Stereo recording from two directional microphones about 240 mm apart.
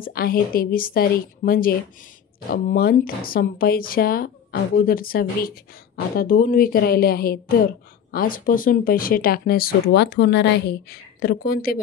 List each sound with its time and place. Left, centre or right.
0.0 s speech: left